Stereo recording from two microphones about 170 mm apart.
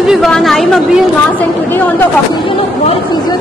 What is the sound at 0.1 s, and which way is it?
Speech, centre (ahead or behind).